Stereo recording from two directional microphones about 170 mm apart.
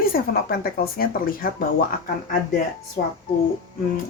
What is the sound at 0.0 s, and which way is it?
Speech, 60° left (ahead or behind).